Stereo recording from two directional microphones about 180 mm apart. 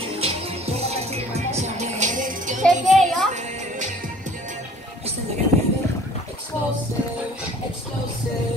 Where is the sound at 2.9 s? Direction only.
Centre (ahead or behind).